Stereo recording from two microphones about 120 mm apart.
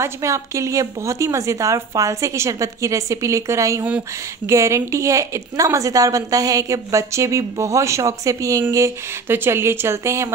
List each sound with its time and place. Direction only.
0.0 s a woman's voice: 25° right (ahead or behind)